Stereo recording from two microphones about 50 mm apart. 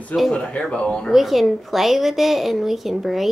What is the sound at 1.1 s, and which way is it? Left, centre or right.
A child's voice, centre.